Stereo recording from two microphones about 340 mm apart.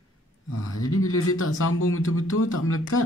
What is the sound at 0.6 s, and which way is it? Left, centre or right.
Speech, left.